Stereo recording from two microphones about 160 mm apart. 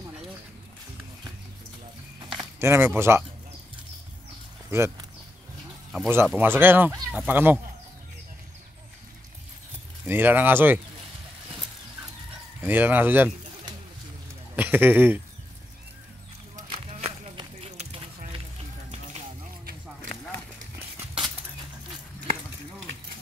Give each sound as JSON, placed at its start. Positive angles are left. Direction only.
{"t": 2.6, "sound": "speech", "side_deg": -15}
{"t": 4.6, "sound": "speech", "side_deg": -15}
{"t": 5.9, "sound": "speech", "side_deg": -15}
{"t": 10.0, "sound": "speech", "side_deg": -10}
{"t": 12.6, "sound": "speech", "side_deg": -10}
{"t": 14.5, "sound": "speech", "side_deg": -10}
{"t": 16.5, "sound": "a sound", "side_deg": -30}